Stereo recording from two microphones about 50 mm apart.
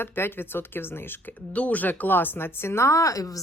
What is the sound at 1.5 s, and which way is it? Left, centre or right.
A woman's voice, left.